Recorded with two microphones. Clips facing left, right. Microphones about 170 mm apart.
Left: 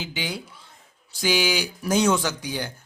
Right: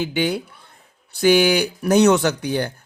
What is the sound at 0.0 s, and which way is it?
Speech, 55° right (ahead or behind).